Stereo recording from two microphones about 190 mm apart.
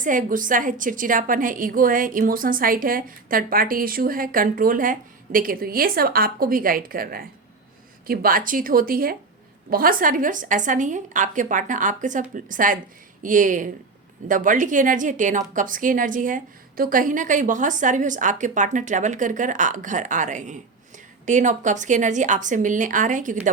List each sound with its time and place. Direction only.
0.0 s a woman's voice: 45° right (ahead or behind)